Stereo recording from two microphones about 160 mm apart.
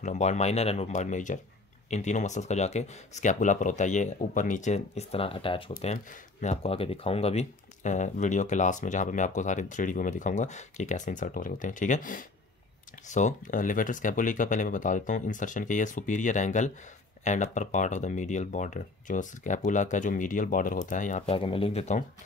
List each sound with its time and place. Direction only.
0.0 s speech: 45° left (ahead or behind)
21.3 s speech: 35° left (ahead or behind)